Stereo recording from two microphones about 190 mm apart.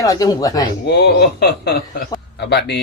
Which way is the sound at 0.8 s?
60° left (ahead or behind).